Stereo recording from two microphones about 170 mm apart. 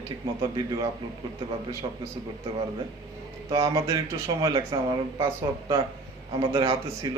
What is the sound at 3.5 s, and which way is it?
A man's voice, 20° right (ahead or behind).